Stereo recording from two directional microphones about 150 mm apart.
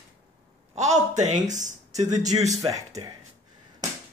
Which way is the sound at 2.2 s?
25° right (ahead or behind).